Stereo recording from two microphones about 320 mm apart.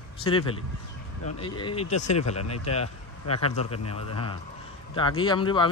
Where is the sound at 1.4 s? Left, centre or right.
Centre.